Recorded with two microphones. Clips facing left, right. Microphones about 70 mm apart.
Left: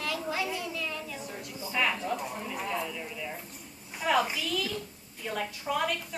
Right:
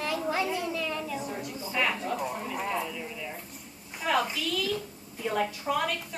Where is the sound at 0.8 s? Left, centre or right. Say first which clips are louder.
Right 4 dB; right.